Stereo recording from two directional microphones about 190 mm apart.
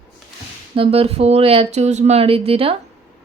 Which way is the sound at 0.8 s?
30° right (ahead or behind).